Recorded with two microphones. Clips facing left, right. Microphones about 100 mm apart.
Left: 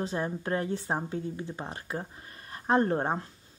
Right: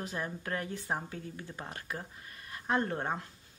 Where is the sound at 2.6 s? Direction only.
35° left (ahead or behind).